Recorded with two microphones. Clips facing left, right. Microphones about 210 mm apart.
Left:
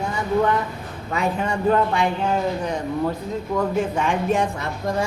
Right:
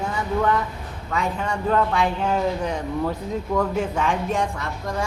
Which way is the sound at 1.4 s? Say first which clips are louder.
Left 2 dB; centre (ahead or behind).